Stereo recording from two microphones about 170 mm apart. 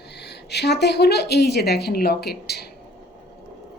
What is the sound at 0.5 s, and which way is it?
A woman's voice, 80° left.